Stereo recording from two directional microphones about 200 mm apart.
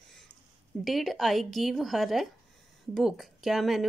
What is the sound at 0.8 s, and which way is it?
A woman's voice, centre (ahead or behind).